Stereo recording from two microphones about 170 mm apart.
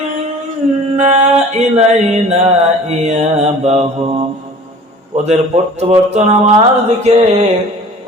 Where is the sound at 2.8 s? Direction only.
40° right (ahead or behind).